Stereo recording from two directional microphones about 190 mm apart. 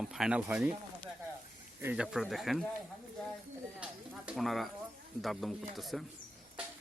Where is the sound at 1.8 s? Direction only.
5° right (ahead or behind).